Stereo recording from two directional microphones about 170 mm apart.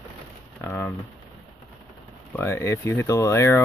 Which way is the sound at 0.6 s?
15° left (ahead or behind).